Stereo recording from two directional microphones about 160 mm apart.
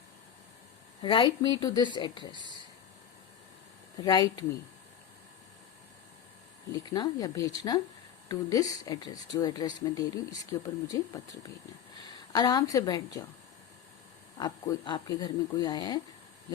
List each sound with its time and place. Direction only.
1.0 s speech: 30° left (ahead or behind)
2.4 s speech: 25° right (ahead or behind)
4.0 s speech: 25° left (ahead or behind)
6.9 s speech: 25° left (ahead or behind)
14.3 s speech: 25° left (ahead or behind)